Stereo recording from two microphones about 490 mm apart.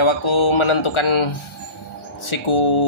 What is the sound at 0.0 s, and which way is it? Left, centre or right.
Speech, left.